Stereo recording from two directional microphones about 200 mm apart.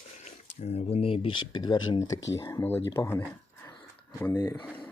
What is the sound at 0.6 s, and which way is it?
Speech, 30° left (ahead or behind).